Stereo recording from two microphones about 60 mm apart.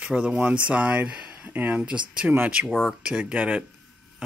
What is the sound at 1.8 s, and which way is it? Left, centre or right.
Speech, centre.